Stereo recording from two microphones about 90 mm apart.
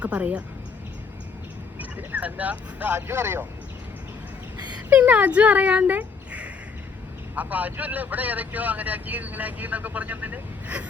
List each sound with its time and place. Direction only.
0.0 s speech: 15° right (ahead or behind)
1.8 s speech: 15° right (ahead or behind)
4.5 s a sound: 50° right (ahead or behind)
4.9 s speech: 15° right (ahead or behind)